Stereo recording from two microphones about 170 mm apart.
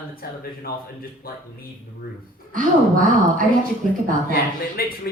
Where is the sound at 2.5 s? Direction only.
50° right (ahead or behind).